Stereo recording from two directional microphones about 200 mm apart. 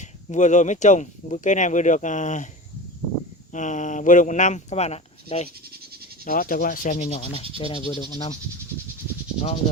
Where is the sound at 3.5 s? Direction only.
40° left (ahead or behind).